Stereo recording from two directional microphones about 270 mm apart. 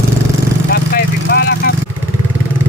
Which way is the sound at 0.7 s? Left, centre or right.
Left.